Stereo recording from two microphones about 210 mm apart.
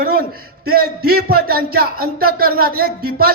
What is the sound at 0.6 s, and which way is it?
Speech, 45° right (ahead or behind).